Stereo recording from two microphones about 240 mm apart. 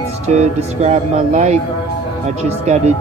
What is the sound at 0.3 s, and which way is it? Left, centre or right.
Speech, right.